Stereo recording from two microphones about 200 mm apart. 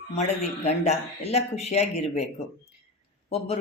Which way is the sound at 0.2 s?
35° left (ahead or behind).